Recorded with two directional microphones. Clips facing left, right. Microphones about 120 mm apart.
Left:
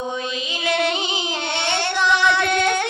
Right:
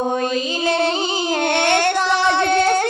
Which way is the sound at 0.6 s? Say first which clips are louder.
Right 1 dB; 35° right (ahead or behind).